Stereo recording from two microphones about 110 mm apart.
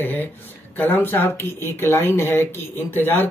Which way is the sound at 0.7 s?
15° left (ahead or behind).